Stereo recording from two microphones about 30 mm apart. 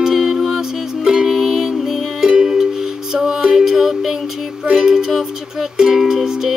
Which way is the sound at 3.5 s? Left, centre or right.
Centre.